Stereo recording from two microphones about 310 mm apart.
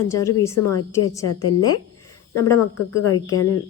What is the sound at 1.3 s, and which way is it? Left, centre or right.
Speech, left.